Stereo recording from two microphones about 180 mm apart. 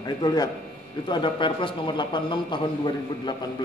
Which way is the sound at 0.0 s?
20° left (ahead or behind).